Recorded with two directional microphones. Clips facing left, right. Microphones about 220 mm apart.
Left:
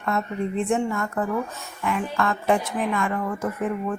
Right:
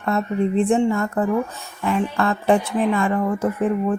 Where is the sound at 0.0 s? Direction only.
30° right (ahead or behind).